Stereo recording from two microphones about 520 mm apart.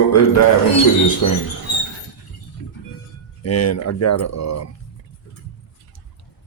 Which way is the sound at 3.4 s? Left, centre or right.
Left.